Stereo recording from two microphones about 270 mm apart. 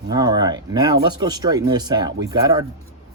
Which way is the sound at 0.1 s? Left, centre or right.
Centre.